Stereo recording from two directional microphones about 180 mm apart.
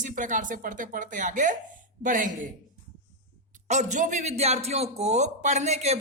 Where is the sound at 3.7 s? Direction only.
40° right (ahead or behind).